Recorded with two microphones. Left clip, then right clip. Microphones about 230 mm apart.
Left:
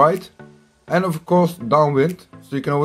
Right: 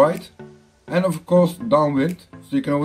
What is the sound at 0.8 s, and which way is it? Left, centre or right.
Speech, left.